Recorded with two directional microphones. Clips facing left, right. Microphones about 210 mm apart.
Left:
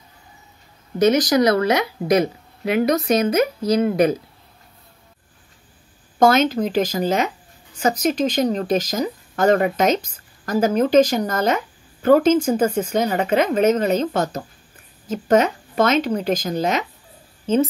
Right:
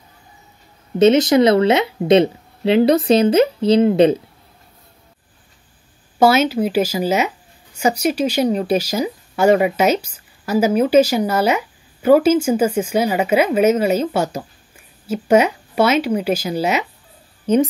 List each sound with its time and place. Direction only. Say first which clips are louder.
0.9 s speech: right 4 dB; 25° right (ahead or behind)
6.1 s speech: right 1 dB; 5° right (ahead or behind)